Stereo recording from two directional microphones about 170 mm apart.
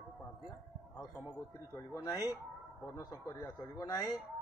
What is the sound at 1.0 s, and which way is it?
Speech, centre (ahead or behind).